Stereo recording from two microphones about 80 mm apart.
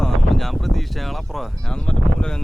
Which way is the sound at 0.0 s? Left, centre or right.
Centre.